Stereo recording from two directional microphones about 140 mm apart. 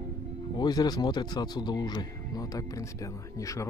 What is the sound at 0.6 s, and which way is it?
Speech, 30° left (ahead or behind).